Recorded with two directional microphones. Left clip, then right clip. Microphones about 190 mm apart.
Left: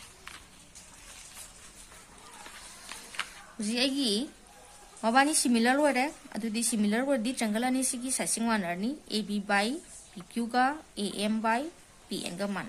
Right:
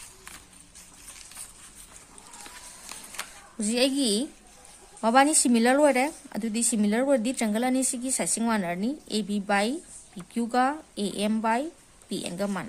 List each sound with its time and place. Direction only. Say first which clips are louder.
3.2 s speech: even; 40° right (ahead or behind)